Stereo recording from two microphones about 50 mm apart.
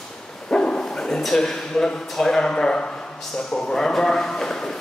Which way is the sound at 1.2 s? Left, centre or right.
Centre.